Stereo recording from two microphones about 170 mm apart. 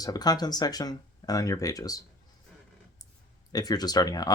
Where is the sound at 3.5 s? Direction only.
20° left (ahead or behind).